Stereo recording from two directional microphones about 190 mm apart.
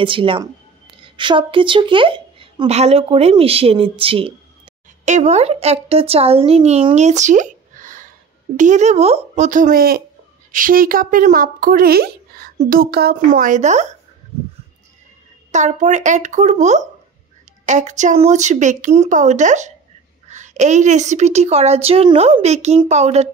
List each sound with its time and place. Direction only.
0.0 s a woman's voice: 25° right (ahead or behind)
15.5 s a woman's voice: 40° right (ahead or behind)